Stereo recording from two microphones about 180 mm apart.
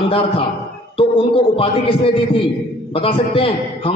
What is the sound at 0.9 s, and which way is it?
A man's voice, 30° left (ahead or behind).